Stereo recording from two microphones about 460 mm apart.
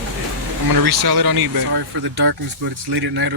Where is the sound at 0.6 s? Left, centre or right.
Right.